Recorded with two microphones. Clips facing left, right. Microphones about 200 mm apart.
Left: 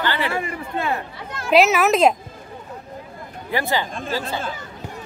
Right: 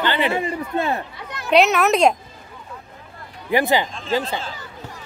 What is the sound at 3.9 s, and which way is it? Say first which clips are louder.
Speech: right 1 dB; 55° left (ahead or behind).